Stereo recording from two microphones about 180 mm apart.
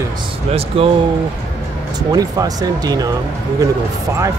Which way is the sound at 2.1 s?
20° right (ahead or behind).